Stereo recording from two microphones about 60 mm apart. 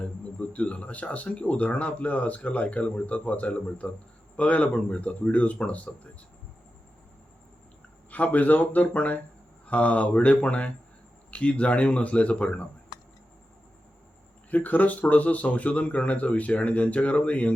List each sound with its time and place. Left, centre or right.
0.0 s speech: left
8.1 s speech: left
14.5 s speech: left